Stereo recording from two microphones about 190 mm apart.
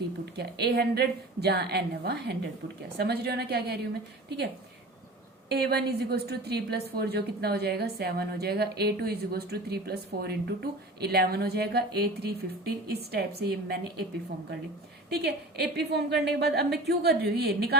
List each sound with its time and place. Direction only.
0.3 s a woman's voice: 60° right (ahead or behind)
5.5 s a woman's voice: 60° right (ahead or behind)
15.1 s a woman's voice: 60° right (ahead or behind)